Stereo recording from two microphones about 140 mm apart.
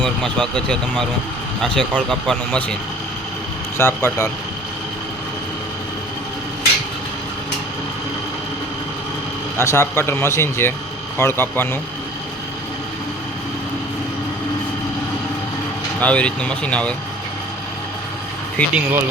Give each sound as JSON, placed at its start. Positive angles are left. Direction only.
{"t": 0.0, "sound": "speech", "side_deg": 5}
{"t": 3.8, "sound": "speech", "side_deg": 20}
{"t": 9.6, "sound": "speech", "side_deg": 20}
{"t": 16.0, "sound": "speech", "side_deg": 10}
{"t": 18.6, "sound": "speech", "side_deg": 10}